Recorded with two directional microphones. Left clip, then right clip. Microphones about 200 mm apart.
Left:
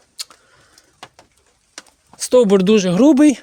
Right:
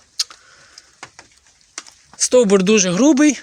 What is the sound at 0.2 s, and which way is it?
Tick-tock, 10° left (ahead or behind).